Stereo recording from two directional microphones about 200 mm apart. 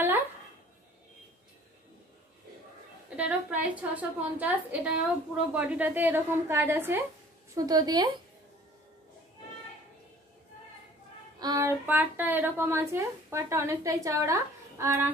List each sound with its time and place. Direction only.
3.2 s a woman's voice: 5° right (ahead or behind)
11.3 s speech: 20° right (ahead or behind)